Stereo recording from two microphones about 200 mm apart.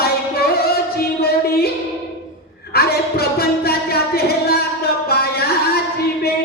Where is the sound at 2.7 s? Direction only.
50° left (ahead or behind).